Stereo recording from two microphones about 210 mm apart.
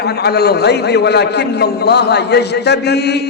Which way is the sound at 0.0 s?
50° left (ahead or behind).